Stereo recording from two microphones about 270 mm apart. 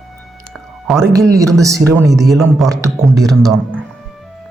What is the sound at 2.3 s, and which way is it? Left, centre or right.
Speech, centre.